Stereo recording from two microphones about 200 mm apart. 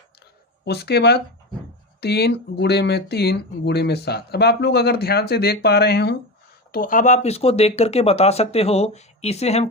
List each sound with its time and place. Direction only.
0.6 s speech: 55° left (ahead or behind); by 9.6 s 30° left (ahead or behind)